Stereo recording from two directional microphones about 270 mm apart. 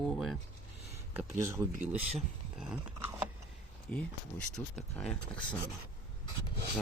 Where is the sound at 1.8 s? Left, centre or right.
Centre.